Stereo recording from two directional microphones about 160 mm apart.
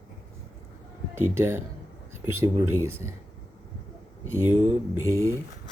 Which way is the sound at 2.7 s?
15° right (ahead or behind).